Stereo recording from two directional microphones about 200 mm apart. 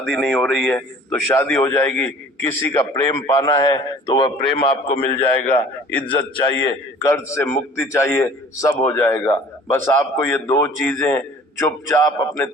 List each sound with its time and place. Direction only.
0.0 s a man's voice: centre (ahead or behind)